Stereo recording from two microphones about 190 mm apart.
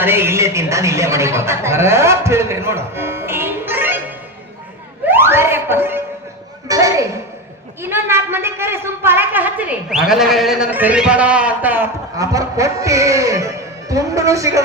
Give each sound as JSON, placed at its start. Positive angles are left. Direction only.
{"t": 0.0, "sound": "speech", "side_deg": -10}
{"t": 5.0, "sound": "a sound", "side_deg": -10}
{"t": 7.8, "sound": "a man's voice", "side_deg": -10}